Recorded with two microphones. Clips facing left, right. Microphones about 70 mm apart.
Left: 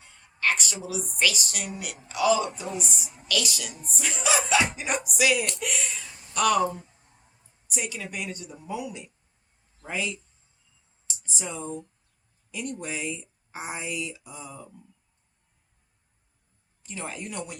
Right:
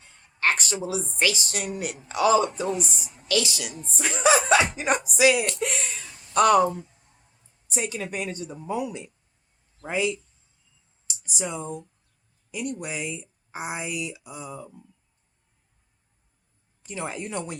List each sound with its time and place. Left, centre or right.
0.4 s a woman's voice: right
5.1 s a woman's voice: right
5.5 s speech: right
7.7 s a woman's voice: right
11.0 s a sound: centre
12.5 s speech: centre
16.9 s a woman's voice: centre